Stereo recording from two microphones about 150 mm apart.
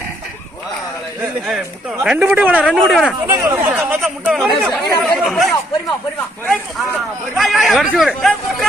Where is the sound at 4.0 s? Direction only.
Centre (ahead or behind).